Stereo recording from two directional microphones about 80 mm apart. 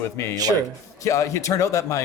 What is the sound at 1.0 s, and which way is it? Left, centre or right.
Speech, left.